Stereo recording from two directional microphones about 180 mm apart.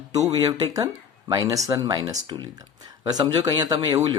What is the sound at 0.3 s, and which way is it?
Speech, 20° right (ahead or behind).